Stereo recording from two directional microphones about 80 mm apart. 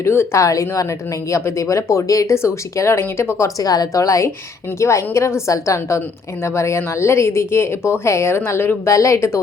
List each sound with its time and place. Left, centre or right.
0.0 s speech: left
3.6 s a woman's voice: left
8.9 s speech: left